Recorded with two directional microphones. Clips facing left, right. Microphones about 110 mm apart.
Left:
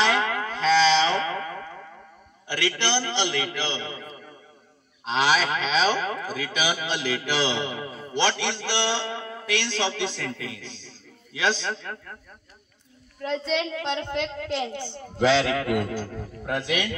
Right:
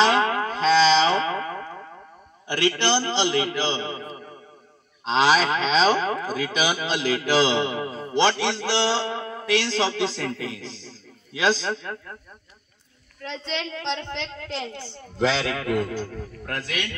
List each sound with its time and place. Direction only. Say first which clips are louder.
0.0 s a sound: right 4 dB; 30° right (ahead or behind)
2.7 s a man's voice: right 3 dB; 30° right (ahead or behind)
13.2 s a woman's voice: left 5 dB; 5° left (ahead or behind)